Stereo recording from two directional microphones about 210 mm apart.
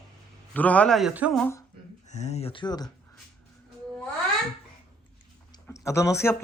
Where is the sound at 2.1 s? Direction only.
30° left (ahead or behind).